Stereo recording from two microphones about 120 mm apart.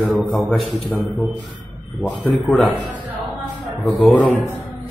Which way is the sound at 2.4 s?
Centre (ahead or behind).